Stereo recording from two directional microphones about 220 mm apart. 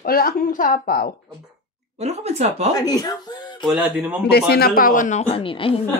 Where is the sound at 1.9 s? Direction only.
30° right (ahead or behind).